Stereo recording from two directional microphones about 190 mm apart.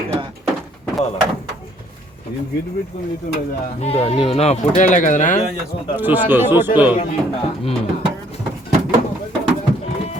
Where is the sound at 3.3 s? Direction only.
50° left (ahead or behind).